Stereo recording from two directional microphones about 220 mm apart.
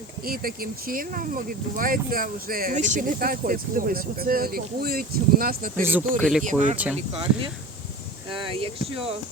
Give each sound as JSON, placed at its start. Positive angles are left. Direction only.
{"t": 0.3, "sound": "speech", "side_deg": -40}
{"t": 6.1, "sound": "speech", "side_deg": 0}
{"t": 6.4, "sound": "speech", "side_deg": -35}